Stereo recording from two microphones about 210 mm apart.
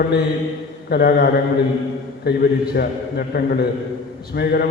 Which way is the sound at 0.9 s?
50° left (ahead or behind).